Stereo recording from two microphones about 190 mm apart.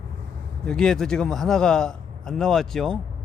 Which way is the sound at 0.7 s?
5° left (ahead or behind).